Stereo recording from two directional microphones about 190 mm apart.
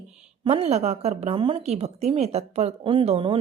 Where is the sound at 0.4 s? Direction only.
30° right (ahead or behind).